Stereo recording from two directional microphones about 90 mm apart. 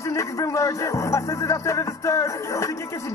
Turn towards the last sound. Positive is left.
turn(degrees=35)  # may be behind; listen again after turning